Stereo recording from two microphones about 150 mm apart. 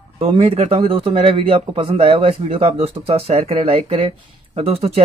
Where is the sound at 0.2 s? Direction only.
40° right (ahead or behind).